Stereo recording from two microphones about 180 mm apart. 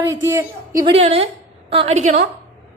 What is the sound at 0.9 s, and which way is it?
Speech, 35° right (ahead or behind).